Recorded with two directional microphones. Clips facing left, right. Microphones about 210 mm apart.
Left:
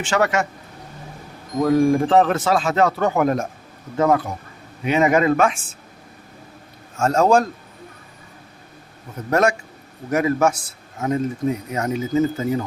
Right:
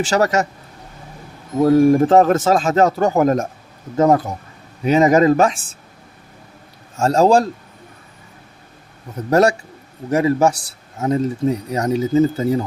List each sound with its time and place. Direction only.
0.0 s speech: 40° right (ahead or behind)
1.6 s speech: 40° right (ahead or behind)
7.0 s speech: 35° right (ahead or behind)
9.3 s a man's voice: 35° right (ahead or behind)